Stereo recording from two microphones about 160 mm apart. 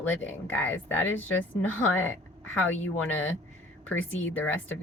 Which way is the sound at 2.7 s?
10° left (ahead or behind).